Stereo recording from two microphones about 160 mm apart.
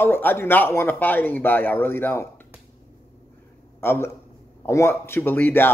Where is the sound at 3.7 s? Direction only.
15° left (ahead or behind).